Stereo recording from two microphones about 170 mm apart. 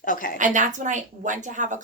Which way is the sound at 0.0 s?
50° left (ahead or behind).